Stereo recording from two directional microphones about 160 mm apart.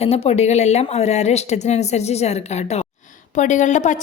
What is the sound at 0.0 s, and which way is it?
A woman's voice, 40° left (ahead or behind).